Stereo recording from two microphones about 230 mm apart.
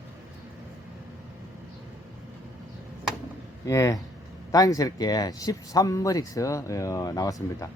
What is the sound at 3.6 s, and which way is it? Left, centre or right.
Speech, centre.